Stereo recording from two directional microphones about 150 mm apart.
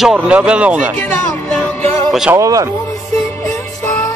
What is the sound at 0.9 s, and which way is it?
Music, 10° left (ahead or behind).